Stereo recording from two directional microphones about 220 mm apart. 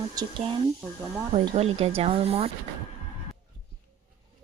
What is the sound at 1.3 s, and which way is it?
A woman's voice, 25° right (ahead or behind).